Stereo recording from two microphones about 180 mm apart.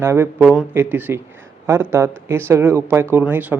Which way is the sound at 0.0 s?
15° right (ahead or behind).